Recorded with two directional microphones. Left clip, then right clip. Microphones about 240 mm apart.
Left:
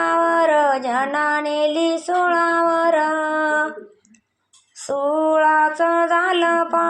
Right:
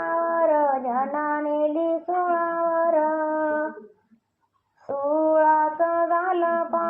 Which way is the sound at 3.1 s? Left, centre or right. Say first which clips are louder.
Left 4 dB; left.